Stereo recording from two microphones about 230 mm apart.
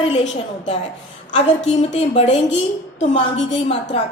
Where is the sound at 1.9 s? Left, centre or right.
Left.